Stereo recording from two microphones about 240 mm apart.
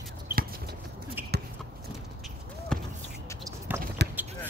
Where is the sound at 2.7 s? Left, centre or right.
Centre.